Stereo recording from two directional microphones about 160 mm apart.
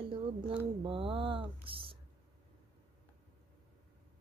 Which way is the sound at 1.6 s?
35° right (ahead or behind).